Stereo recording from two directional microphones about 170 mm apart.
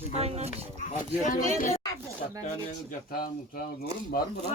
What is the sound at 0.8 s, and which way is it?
Speech, 50° left (ahead or behind).